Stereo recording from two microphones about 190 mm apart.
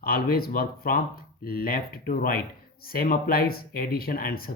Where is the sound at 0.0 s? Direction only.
50° left (ahead or behind).